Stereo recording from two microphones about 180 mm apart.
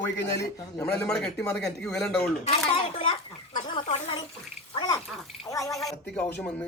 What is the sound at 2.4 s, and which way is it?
Speech, 30° left (ahead or behind).